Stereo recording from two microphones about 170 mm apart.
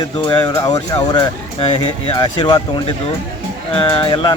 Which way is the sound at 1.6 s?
30° left (ahead or behind).